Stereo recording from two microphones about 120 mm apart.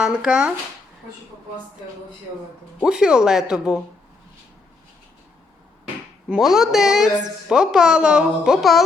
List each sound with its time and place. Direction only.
0.0 s speech: 5° right (ahead or behind)
2.8 s speech: 5° right (ahead or behind)
6.2 s a woman's voice: centre (ahead or behind)